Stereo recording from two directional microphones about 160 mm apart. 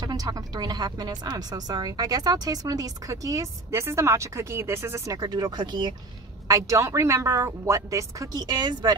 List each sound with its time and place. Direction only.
0.0 s a woman's voice: 25° right (ahead or behind)